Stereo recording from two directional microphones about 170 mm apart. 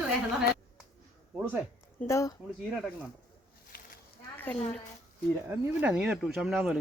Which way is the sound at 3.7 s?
60° left (ahead or behind).